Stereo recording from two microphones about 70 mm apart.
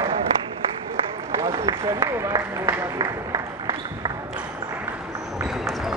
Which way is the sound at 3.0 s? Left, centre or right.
Right.